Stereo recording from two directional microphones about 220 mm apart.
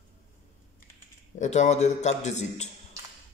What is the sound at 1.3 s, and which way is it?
A man's voice, 30° left (ahead or behind).